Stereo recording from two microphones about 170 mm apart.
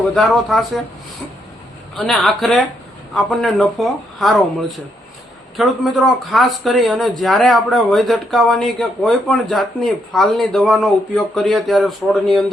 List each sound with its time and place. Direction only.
0.1 s speech: 5° left (ahead or behind)
2.0 s speech: centre (ahead or behind)
5.6 s speech: centre (ahead or behind)